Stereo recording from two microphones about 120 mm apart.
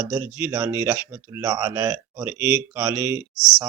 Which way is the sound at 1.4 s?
30° right (ahead or behind).